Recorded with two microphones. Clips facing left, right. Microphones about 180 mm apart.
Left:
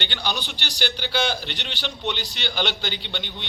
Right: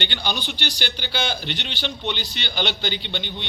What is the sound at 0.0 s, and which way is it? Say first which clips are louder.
A man's voice: right 1 dB; centre (ahead or behind).